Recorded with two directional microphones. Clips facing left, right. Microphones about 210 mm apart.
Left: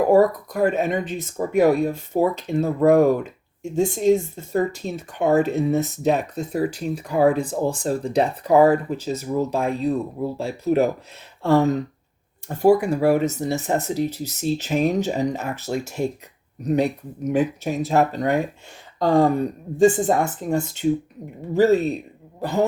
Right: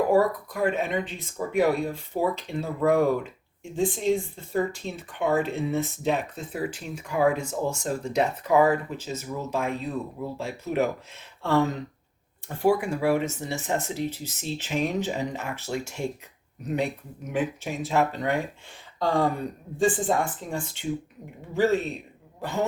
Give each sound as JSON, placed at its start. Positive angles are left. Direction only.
{"t": 0.1, "sound": "a woman's voice", "side_deg": 40}